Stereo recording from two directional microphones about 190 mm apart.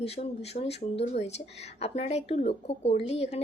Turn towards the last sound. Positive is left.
turn(degrees=30)  # may be behind; listen again after turning